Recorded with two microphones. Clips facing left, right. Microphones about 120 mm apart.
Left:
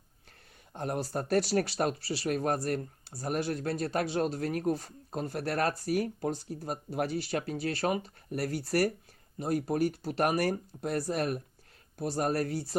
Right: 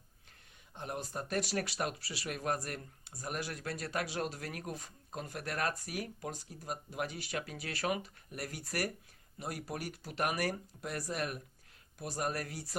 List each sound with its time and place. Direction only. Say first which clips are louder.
0.7 s speech: left 8 dB; 40° left (ahead or behind)